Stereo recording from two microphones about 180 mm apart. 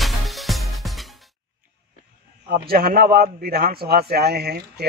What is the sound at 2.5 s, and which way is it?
A man's voice, 55° right (ahead or behind).